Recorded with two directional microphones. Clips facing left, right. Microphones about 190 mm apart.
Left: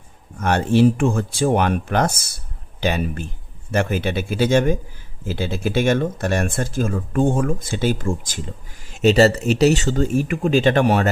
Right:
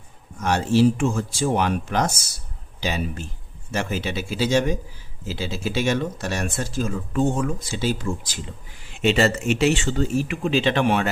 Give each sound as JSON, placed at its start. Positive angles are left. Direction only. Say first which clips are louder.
{"t": 0.3, "sound": "speech", "louder": "left 2 dB", "side_deg": 55}